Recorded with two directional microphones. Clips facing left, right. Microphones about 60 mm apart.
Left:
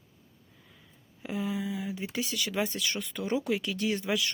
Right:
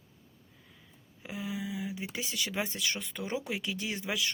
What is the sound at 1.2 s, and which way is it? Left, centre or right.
Speech, centre.